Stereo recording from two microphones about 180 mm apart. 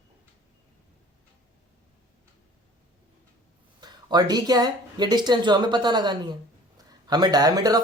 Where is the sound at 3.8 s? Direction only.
25° right (ahead or behind).